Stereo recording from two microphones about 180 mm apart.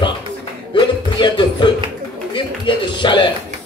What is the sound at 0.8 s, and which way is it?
Music, 25° left (ahead or behind).